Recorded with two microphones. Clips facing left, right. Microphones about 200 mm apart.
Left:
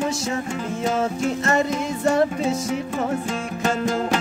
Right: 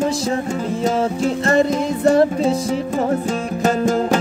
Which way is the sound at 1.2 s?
35° right (ahead or behind).